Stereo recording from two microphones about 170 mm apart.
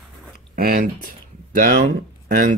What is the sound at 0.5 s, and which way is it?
Speech, 60° right (ahead or behind).